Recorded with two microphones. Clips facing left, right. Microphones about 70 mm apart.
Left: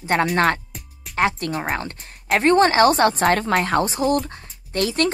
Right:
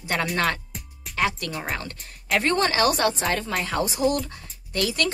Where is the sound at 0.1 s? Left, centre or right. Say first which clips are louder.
Left 6 dB; left.